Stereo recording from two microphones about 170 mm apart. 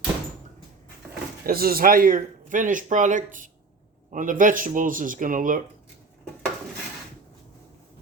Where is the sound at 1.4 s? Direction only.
60° right (ahead or behind).